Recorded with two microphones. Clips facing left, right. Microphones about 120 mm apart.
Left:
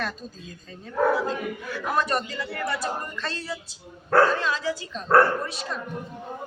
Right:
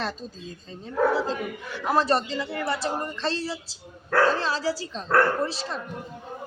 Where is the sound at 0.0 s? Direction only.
30° right (ahead or behind).